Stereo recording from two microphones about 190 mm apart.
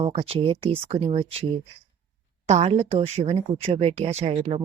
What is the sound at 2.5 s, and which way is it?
A woman's voice, 35° right (ahead or behind).